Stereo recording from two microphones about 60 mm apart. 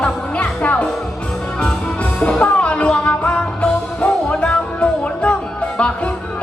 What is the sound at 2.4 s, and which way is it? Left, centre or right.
Music, centre.